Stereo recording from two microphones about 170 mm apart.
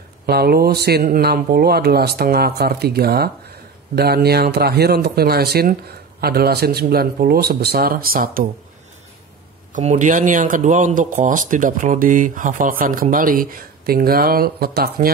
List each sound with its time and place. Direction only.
0.3 s speech: 65° right (ahead or behind)
9.7 s speech: 45° right (ahead or behind); by 15.0 s 65° right (ahead or behind)